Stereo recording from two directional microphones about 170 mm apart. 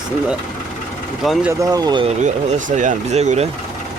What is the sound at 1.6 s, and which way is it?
Speech, 25° right (ahead or behind).